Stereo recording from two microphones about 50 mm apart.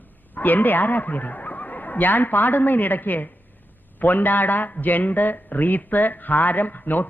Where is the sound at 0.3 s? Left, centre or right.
Left.